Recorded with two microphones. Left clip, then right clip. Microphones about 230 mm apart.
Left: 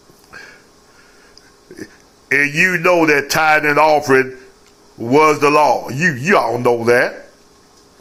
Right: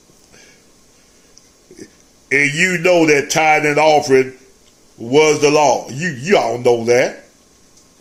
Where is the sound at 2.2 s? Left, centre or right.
Centre.